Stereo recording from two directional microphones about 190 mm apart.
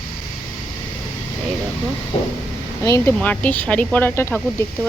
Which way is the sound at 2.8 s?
15° left (ahead or behind).